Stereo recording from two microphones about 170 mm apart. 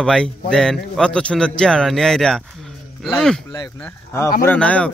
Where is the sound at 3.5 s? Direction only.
15° left (ahead or behind).